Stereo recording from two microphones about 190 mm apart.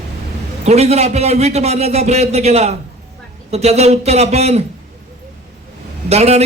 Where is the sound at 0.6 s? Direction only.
35° right (ahead or behind).